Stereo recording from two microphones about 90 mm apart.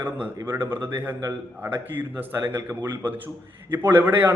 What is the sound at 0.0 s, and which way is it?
A man's voice, 25° right (ahead or behind).